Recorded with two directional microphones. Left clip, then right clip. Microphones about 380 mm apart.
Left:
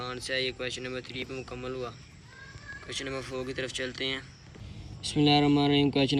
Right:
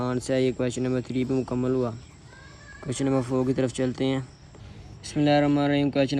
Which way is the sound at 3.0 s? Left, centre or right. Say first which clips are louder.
Right 13 dB; centre.